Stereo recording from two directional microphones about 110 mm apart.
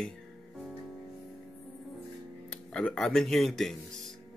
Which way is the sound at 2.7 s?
5° left (ahead or behind).